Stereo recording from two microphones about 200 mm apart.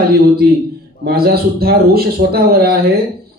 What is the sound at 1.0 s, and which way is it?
Speech, 50° right (ahead or behind).